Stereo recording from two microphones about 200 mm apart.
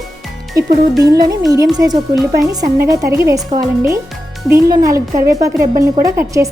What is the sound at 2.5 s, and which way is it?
A woman's voice, 15° right (ahead or behind).